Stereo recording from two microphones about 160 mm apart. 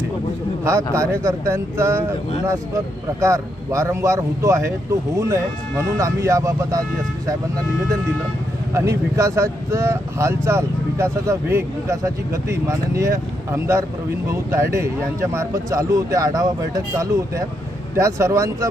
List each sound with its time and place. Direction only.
0.6 s a man's voice: 20° right (ahead or behind)
8.7 s a man's voice: 20° right (ahead or behind)